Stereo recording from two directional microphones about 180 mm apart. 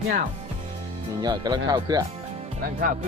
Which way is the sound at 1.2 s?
25° right (ahead or behind).